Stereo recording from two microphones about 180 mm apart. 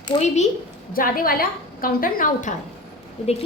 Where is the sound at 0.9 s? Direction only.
55° left (ahead or behind).